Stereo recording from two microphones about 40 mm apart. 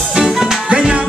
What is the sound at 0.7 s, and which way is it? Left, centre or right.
Music, right.